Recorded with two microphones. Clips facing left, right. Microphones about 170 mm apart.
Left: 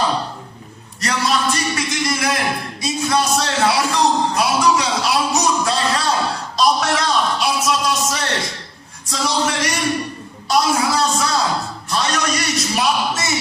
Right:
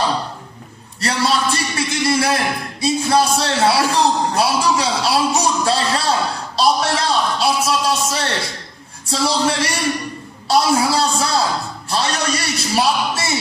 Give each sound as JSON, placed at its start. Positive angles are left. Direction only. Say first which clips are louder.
{"t": 1.0, "sound": "a man's voice", "louder": "right 1 dB", "side_deg": -30}